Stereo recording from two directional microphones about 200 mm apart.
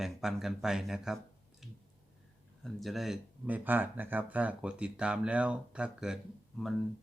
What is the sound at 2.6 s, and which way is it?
Speech, centre (ahead or behind).